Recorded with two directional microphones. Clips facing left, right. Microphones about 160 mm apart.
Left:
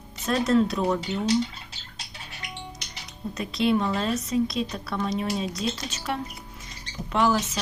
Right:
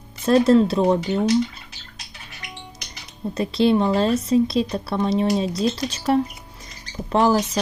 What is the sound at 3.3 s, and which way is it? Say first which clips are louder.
Speech: right 6 dB; 30° right (ahead or behind).